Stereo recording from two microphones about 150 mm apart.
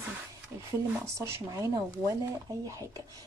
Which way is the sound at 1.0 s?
20° right (ahead or behind).